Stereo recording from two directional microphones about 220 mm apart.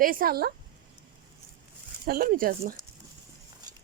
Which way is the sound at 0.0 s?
40° right (ahead or behind).